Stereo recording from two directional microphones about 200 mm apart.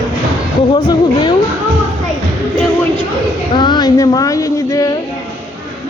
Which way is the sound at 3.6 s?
20° left (ahead or behind).